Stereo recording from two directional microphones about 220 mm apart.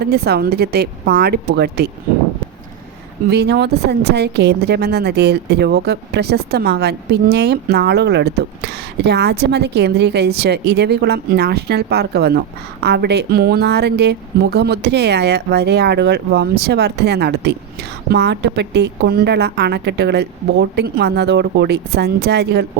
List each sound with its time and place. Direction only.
0.0 s speech: 45° right (ahead or behind)
3.2 s speech: 50° right (ahead or behind)